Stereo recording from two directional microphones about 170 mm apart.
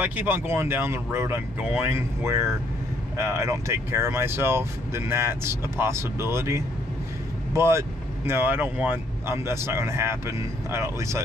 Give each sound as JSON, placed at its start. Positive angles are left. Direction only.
{"t": 0.0, "sound": "speech", "side_deg": -10}